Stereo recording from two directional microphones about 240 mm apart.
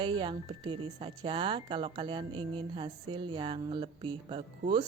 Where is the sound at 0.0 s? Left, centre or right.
Centre.